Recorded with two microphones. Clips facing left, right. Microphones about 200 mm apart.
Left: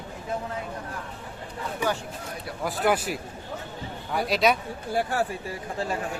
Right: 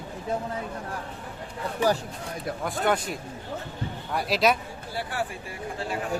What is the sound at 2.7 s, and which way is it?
Speech, 5° left (ahead or behind).